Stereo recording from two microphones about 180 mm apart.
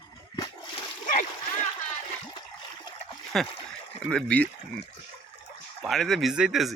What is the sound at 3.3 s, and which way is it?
Speech, centre (ahead or behind).